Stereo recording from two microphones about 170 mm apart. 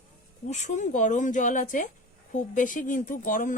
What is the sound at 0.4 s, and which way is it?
Speech, 45° left (ahead or behind).